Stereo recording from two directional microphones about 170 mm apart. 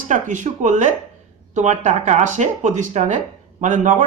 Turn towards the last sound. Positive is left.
turn(degrees=-45)  # may be behind; listen again after turning